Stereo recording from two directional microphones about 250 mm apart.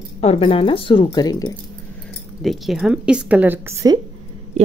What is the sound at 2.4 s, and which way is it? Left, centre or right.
A woman's voice, centre.